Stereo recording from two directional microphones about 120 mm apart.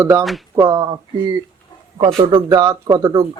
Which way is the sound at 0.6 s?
35° right (ahead or behind).